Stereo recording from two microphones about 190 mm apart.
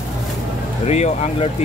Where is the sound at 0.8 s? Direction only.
35° left (ahead or behind).